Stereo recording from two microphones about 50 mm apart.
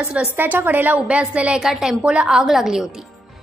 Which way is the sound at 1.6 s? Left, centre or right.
Centre.